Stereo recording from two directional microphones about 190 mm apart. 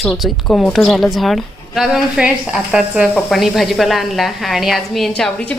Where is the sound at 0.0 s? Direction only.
Centre (ahead or behind).